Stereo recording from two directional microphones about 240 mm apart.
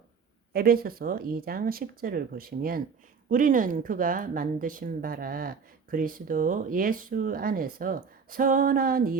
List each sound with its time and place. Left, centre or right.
0.5 s a woman's voice: right